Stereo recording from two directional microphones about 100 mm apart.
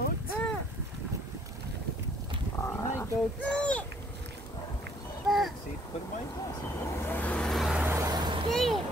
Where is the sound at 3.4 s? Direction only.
10° left (ahead or behind).